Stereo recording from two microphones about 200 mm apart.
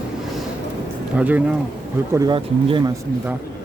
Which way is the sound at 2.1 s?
20° right (ahead or behind).